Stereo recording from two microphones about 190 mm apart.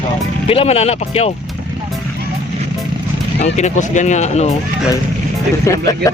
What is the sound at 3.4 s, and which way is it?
Speech, 40° left (ahead or behind).